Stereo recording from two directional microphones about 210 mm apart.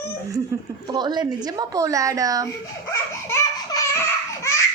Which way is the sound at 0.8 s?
20° right (ahead or behind).